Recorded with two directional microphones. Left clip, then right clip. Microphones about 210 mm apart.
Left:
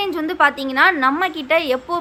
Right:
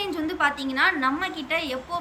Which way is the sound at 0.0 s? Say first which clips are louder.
Left 8 dB; 15° left (ahead or behind).